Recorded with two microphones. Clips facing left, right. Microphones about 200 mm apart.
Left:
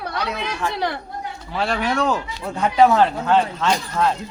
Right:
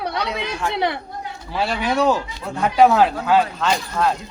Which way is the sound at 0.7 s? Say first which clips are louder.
Right 6 dB; 20° right (ahead or behind).